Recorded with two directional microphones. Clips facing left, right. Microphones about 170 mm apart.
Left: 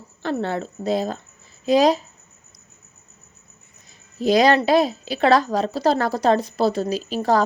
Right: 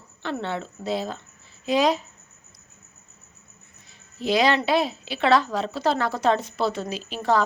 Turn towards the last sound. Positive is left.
turn(degrees=40)  # may be behind; listen again after turning